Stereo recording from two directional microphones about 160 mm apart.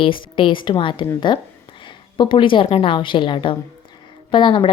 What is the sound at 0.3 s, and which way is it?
A woman's voice, 30° left (ahead or behind).